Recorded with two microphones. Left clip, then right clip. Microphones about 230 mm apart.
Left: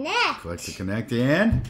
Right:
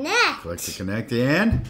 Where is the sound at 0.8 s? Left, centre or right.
Centre.